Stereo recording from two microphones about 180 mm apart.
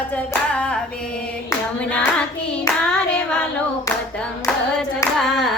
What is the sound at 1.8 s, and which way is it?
Hands, 5° left (ahead or behind).